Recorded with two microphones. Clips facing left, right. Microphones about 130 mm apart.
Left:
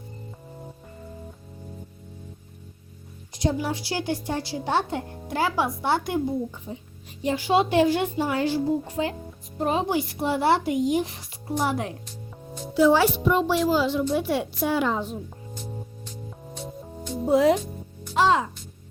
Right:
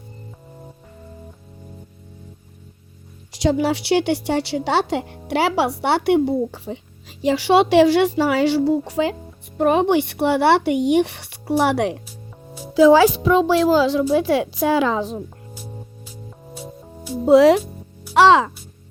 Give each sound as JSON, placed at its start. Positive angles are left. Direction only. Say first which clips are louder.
{"t": 3.3, "sound": "a woman's voice", "louder": "right 7 dB", "side_deg": -85}
{"t": 5.3, "sound": "a woman's voice", "louder": "right 6 dB", "side_deg": -75}
{"t": 9.6, "sound": "speech", "louder": "right 8 dB", "side_deg": -65}
{"t": 12.0, "sound": "music", "louder": "even", "side_deg": -5}
{"t": 12.7, "sound": "speech", "louder": "right 7 dB", "side_deg": -90}
{"t": 15.5, "sound": "music", "louder": "left 2 dB", "side_deg": -5}
{"t": 17.2, "sound": "speech", "louder": "right 8 dB", "side_deg": -90}
{"t": 18.1, "sound": "music", "louder": "right 8 dB", "side_deg": -85}